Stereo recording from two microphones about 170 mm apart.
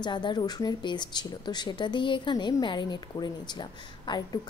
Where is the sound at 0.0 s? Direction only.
25° left (ahead or behind).